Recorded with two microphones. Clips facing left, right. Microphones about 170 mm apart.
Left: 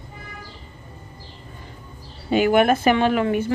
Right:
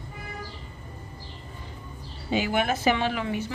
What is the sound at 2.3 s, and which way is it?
Speech, 55° left (ahead or behind).